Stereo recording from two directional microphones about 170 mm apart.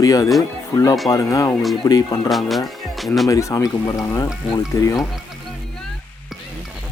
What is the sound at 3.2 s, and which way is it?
Speech, 20° left (ahead or behind).